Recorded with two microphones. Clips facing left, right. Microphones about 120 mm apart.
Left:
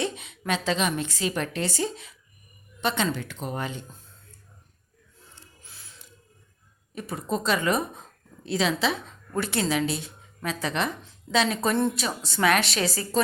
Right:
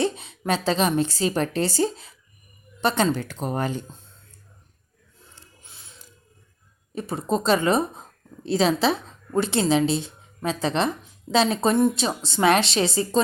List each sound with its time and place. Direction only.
0.0 s a woman's voice: 35° right (ahead or behind)
5.6 s music: 20° right (ahead or behind)
6.9 s a woman's voice: 30° right (ahead or behind)